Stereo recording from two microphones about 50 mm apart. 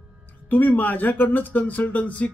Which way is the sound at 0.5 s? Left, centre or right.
Left.